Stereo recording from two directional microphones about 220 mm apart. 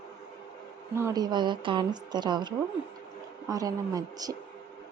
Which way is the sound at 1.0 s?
15° right (ahead or behind).